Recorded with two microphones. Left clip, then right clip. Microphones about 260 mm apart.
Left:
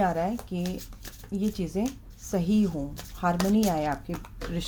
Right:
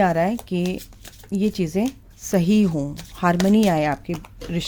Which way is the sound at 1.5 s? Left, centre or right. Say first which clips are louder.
Right 7 dB; right.